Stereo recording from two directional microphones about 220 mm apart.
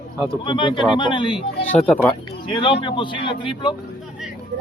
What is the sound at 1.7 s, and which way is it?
Speech, 5° left (ahead or behind).